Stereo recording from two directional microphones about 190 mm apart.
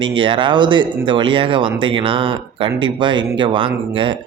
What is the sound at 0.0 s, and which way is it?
Speech, 25° right (ahead or behind).